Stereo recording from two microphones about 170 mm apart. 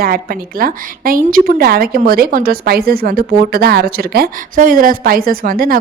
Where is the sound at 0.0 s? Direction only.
60° right (ahead or behind).